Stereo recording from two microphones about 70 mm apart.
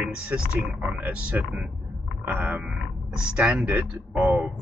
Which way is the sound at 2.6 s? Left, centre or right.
Centre.